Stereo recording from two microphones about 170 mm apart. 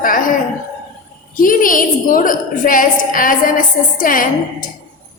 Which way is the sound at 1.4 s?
50° left (ahead or behind).